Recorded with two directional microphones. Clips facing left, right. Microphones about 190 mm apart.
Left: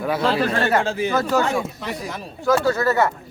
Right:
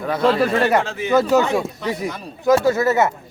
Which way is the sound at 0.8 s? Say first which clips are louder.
Left 3 dB; 30° left (ahead or behind).